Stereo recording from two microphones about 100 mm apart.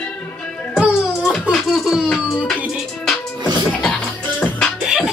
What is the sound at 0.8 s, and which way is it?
Music, 10° right (ahead or behind).